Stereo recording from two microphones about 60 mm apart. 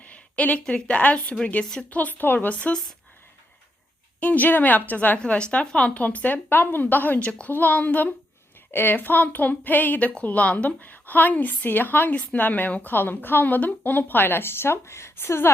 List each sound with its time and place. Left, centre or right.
0.0 s a sound: left
0.7 s a woman's voice: left
4.2 s a woman's voice: left
5.2 s a woman's voice: centre; by 15.5 s left